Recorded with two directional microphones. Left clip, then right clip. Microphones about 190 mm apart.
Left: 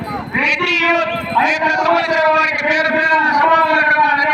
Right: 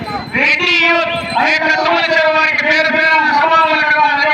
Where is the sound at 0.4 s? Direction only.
10° left (ahead or behind).